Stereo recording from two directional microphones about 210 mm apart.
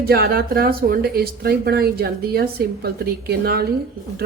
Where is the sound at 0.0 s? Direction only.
45° right (ahead or behind).